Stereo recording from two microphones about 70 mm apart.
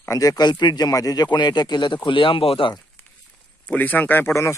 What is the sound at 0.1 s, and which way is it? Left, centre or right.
Speech, left.